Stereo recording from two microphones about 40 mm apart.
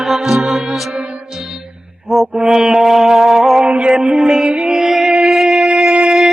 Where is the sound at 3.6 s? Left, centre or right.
Right.